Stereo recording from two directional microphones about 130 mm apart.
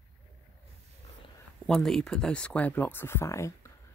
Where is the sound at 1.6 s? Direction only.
5° left (ahead or behind).